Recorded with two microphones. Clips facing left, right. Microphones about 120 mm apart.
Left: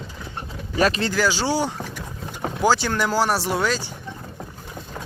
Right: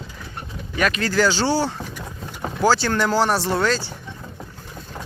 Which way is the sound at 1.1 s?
10° left (ahead or behind).